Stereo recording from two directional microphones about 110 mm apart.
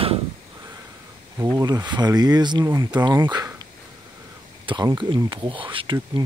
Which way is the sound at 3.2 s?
40° right (ahead or behind).